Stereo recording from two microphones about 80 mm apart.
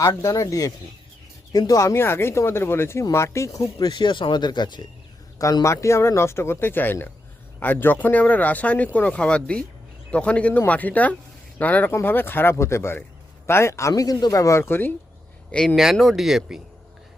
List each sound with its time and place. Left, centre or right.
0.0 s speech: left
5.6 s speech: left
14.6 s speech: left
15.7 s speech: centre